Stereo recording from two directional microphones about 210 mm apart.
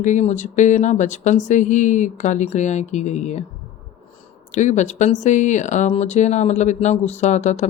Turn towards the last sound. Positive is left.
turn(degrees=35)  # may be behind; listen again after turning